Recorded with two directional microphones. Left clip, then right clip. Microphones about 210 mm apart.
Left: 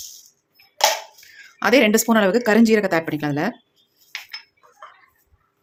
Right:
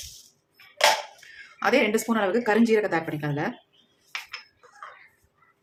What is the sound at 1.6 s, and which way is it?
Speech, 40° left (ahead or behind).